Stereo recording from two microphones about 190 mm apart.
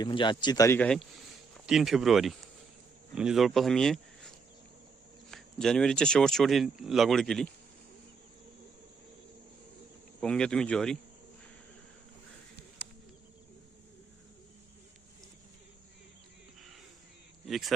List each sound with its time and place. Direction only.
0.0 s speech: 25° left (ahead or behind); by 4.3 s 5° left (ahead or behind)
5.3 s speech: 5° left (ahead or behind)
10.2 s speech: 5° left (ahead or behind)
17.4 s speech: centre (ahead or behind)